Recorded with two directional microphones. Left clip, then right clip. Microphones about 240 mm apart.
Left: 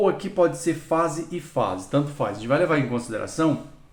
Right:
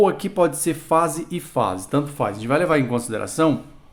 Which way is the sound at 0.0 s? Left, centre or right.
Right.